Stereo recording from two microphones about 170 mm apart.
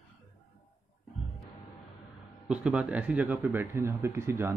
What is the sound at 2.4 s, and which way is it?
Speech, 5° right (ahead or behind).